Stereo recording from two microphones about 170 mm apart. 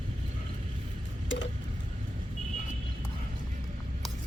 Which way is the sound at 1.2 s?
90° left.